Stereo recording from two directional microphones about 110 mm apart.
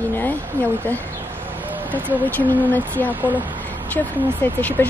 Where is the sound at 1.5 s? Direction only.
15° right (ahead or behind).